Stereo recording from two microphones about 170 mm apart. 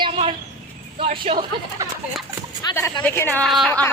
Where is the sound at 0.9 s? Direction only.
30° right (ahead or behind).